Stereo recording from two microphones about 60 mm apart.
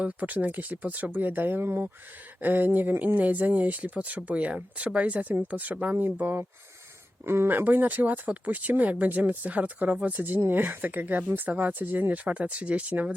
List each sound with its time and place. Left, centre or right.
0.0 s speech: right